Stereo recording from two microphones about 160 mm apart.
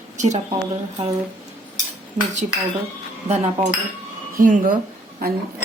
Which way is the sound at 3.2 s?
45° right (ahead or behind).